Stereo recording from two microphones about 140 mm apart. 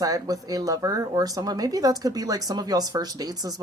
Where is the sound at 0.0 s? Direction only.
25° right (ahead or behind).